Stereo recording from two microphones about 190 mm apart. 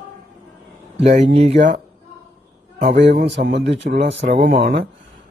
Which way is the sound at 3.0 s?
65° right (ahead or behind).